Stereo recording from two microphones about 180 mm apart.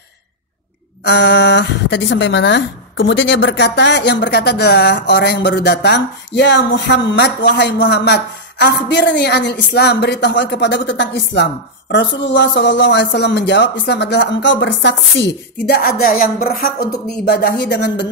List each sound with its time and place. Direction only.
1.0 s speech: 75° left (ahead or behind)